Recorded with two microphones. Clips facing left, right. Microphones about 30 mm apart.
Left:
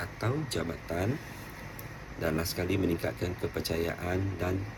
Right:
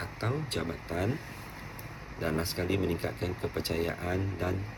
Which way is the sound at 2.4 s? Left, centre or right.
Centre.